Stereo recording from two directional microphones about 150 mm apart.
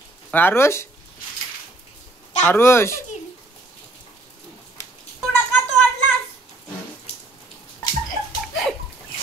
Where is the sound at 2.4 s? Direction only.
15° left (ahead or behind).